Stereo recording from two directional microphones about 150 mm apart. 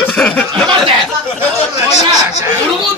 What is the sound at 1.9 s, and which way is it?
Speech, 45° left (ahead or behind).